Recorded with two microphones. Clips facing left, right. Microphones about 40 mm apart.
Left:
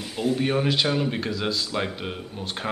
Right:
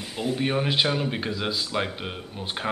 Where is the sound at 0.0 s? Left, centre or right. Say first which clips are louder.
Left 2 dB; centre.